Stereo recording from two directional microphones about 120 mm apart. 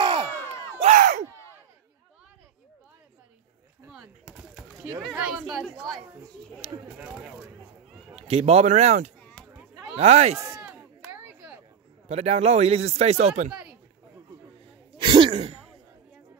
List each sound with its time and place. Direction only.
0.7 s a sound: 80° right
3.8 s a sound: 5° right (ahead or behind)
5.1 s speech: 10° right (ahead or behind)
6.6 s speech: 60° right (ahead or behind)
7.0 s speech: 5° right (ahead or behind)
8.2 s speech: 60° right (ahead or behind)
9.6 s a sound: 15° right (ahead or behind)
9.9 s speech: 60° right (ahead or behind)
10.6 s chop: 5° right (ahead or behind)
11.1 s a sound: 15° right (ahead or behind)
12.1 s speech: 65° right (ahead or behind)
15.0 s throat clearing: 45° right (ahead or behind)
15.3 s throat clearing: 60° right (ahead or behind)